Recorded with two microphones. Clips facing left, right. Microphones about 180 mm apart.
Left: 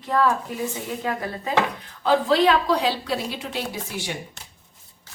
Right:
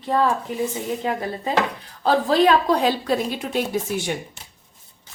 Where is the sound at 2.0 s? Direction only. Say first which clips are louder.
Right 1 dB; 45° right (ahead or behind).